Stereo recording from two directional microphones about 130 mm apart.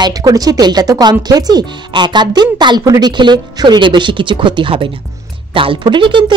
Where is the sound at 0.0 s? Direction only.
30° right (ahead or behind).